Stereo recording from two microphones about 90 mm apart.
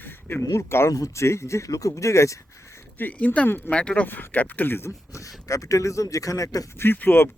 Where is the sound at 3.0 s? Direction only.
20° left (ahead or behind).